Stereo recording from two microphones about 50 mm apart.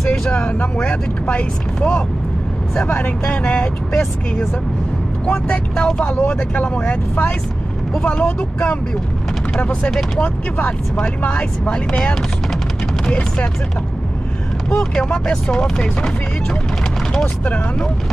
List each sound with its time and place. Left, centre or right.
0.0 s vehicle: centre
1.2 s speech: left
2.7 s speech: left
5.3 s speech: left
6.1 s speech: left
6.6 s speech: left
11.2 s speech: left
11.9 s chopping: centre
15.0 s chopping: centre